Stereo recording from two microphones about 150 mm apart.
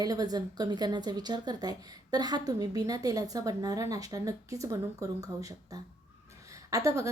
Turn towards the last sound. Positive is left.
turn(degrees=-20)  # may be behind; listen again after turning